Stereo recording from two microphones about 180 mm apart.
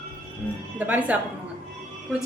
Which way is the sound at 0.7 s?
10° right (ahead or behind).